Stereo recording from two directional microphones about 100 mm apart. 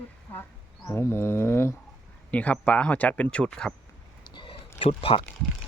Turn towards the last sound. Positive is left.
turn(degrees=65)  # may be behind; listen again after turning